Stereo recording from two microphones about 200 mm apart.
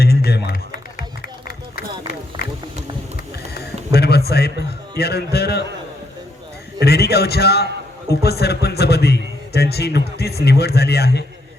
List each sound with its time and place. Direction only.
0.0 s music: 50° left (ahead or behind)
3.5 s a sound: 55° left (ahead or behind)
4.9 s a man's voice: 55° left (ahead or behind)
6.8 s a man's voice: 55° left (ahead or behind)